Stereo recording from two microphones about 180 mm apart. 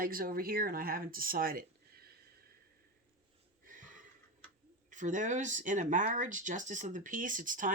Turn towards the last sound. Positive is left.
turn(degrees=-50)  # may be behind; listen again after turning